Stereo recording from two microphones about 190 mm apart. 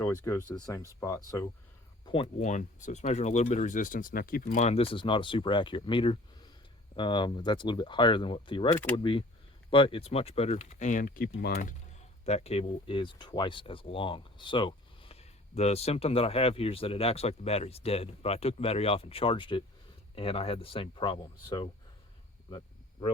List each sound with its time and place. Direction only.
0.0 s speech: 15° left (ahead or behind)
2.0 s speech: 25° left (ahead or behind)
2.4 s speech: 40° left (ahead or behind); by 11.6 s 55° left (ahead or behind)
12.2 s speech: 35° left (ahead or behind)